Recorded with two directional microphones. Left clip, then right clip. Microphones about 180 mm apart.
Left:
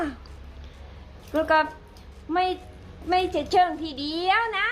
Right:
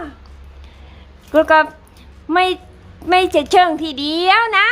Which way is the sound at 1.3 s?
15° right (ahead or behind).